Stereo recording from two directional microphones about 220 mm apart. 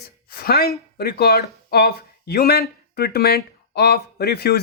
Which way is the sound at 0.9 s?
45° left (ahead or behind).